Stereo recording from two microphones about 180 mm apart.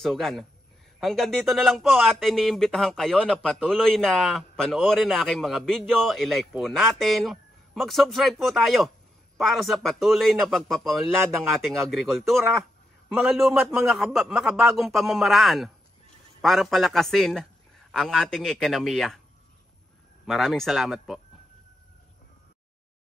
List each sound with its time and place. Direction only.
0.0 s speech: centre (ahead or behind)
20.2 s speech: centre (ahead or behind)